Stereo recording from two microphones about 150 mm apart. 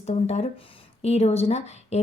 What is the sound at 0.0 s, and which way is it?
Speech, 45° left (ahead or behind).